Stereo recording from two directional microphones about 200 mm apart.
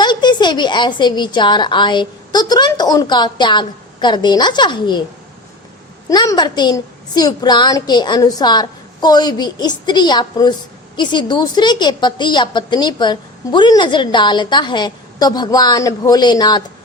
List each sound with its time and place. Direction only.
0.0 s a woman's voice: 20° left (ahead or behind)
6.1 s a woman's voice: 20° left (ahead or behind)